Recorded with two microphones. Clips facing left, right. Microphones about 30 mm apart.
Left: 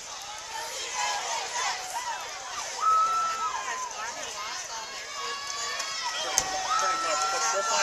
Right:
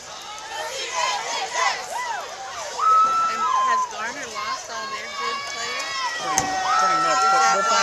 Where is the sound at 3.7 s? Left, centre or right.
Right.